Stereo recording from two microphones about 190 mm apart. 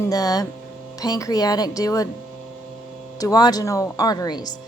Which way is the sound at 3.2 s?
20° left (ahead or behind).